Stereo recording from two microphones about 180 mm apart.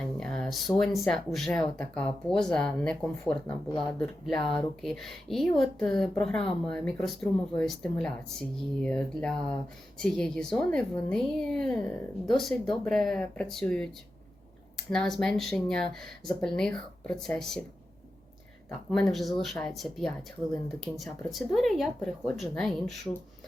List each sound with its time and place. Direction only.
0.2 s speech: 5° left (ahead or behind)
18.9 s speech: centre (ahead or behind)